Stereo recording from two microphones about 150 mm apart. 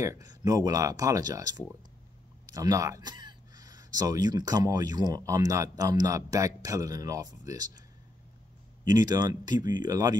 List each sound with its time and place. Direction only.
0.0 s speech: 25° right (ahead or behind)
2.5 s speech: 25° right (ahead or behind)
8.8 s speech: 25° right (ahead or behind)